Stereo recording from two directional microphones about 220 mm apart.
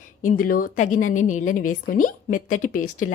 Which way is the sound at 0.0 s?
35° left (ahead or behind).